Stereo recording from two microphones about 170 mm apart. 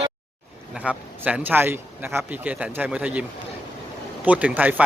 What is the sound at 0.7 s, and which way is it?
Speech, 5° right (ahead or behind).